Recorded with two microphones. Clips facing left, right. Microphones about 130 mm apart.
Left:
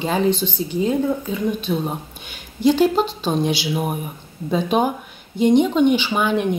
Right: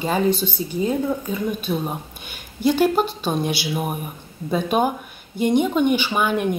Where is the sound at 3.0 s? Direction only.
10° right (ahead or behind).